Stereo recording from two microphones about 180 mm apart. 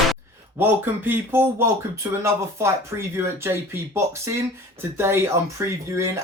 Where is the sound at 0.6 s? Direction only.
10° right (ahead or behind).